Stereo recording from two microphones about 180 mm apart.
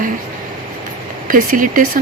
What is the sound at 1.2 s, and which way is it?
Speech, 50° right (ahead or behind).